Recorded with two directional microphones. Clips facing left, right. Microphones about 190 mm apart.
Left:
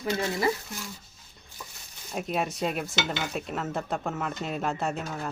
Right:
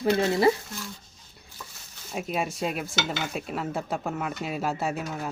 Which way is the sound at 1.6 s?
15° left (ahead or behind).